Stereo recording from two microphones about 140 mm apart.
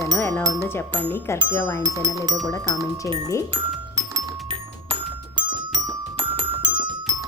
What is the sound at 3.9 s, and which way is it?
Music, 25° right (ahead or behind).